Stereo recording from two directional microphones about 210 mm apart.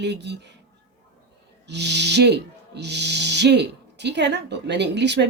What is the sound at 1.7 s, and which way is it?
A woman's voice, 55° right (ahead or behind).